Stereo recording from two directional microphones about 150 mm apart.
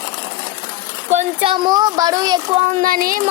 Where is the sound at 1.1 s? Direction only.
35° right (ahead or behind).